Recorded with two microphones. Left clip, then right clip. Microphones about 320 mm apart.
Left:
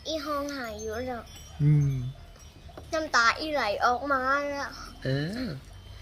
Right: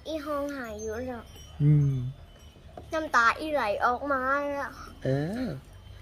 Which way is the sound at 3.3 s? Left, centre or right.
Centre.